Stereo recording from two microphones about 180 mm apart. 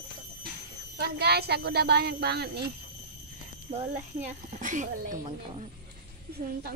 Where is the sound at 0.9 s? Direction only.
65° right (ahead or behind).